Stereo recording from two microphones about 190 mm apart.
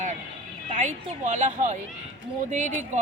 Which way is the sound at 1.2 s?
40° right (ahead or behind).